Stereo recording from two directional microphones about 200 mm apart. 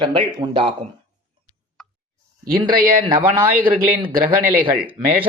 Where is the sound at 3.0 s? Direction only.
25° right (ahead or behind).